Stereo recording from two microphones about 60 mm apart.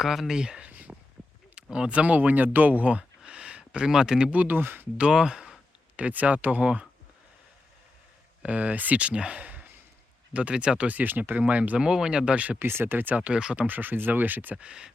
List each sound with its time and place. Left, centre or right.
0.0 s speech: centre
0.7 s a sound: right
1.5 s speech: centre
4.3 s speech: right
4.9 s speech: centre
6.0 s speech: right
8.4 s speech: right
11.8 s speech: centre
12.5 s speech: right; by 13.7 s centre
13.7 s speech: right
14.6 s speech: centre